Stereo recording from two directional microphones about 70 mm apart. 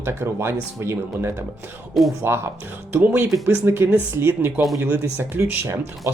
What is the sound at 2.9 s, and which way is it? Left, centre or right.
Speech, right.